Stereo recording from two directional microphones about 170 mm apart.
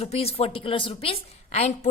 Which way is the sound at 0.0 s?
35° left (ahead or behind).